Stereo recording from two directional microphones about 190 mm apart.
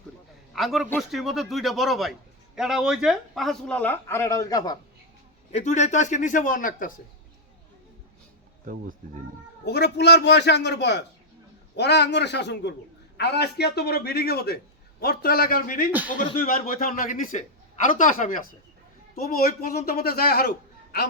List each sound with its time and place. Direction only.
0.5 s speech: centre (ahead or behind); by 4.8 s 20° left (ahead or behind)
5.5 s a man's voice: 35° left (ahead or behind)
8.6 s speech: 45° right (ahead or behind)
9.6 s a man's voice: 60° left (ahead or behind)